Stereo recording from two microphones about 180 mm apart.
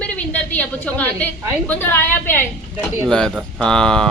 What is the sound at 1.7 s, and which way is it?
A man's voice, 10° left (ahead or behind).